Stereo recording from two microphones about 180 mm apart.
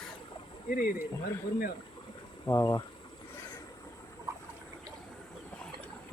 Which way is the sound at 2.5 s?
20° left (ahead or behind).